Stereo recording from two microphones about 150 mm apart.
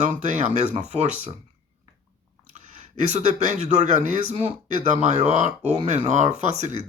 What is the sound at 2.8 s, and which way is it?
Speech, 50° right (ahead or behind).